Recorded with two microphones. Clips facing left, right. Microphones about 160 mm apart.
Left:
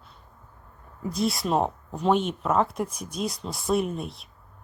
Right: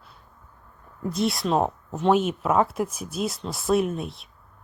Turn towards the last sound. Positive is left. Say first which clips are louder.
# right 3 dB
turn(degrees=0)  # may be behind; listen again after turning